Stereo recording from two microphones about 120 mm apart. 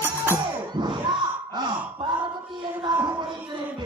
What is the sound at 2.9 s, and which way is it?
Music, 35° right (ahead or behind).